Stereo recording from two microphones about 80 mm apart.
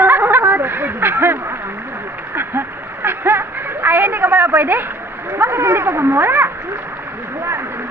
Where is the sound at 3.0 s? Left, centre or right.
Right.